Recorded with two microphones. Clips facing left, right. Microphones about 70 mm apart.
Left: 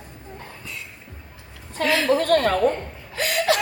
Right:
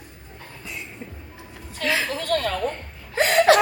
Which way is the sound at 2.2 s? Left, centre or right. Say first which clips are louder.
Left 5 dB; left.